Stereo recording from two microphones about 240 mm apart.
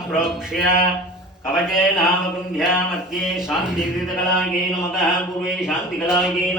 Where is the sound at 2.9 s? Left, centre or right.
Centre.